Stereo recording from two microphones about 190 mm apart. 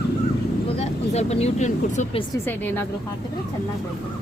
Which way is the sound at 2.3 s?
10° left (ahead or behind).